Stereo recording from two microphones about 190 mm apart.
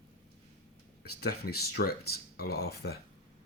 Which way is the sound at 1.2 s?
55° left (ahead or behind).